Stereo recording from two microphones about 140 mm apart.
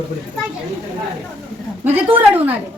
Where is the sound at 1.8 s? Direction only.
10° right (ahead or behind).